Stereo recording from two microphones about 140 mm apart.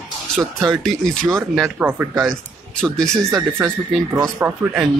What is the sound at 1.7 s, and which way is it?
Speech, 15° right (ahead or behind).